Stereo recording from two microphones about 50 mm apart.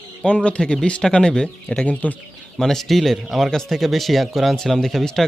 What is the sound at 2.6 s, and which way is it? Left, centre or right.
Speech, centre.